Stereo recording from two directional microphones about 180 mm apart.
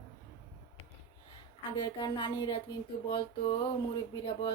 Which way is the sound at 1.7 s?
25° left (ahead or behind).